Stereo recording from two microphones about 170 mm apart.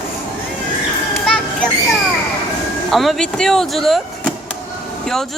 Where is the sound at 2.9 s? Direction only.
Centre (ahead or behind).